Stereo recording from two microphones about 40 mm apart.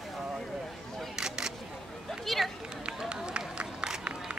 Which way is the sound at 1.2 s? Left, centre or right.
Centre.